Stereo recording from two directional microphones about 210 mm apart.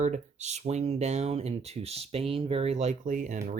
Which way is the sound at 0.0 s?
35° right (ahead or behind).